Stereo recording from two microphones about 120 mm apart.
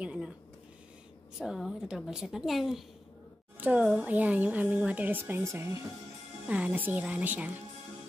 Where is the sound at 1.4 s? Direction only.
5° right (ahead or behind).